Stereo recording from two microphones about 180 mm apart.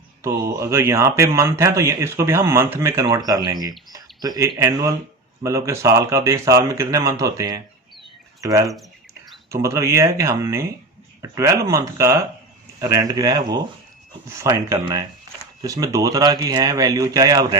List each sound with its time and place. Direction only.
0.2 s speech: 15° right (ahead or behind)